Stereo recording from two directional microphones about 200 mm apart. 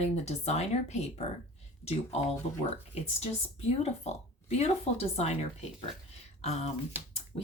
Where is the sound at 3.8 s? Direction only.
35° left (ahead or behind).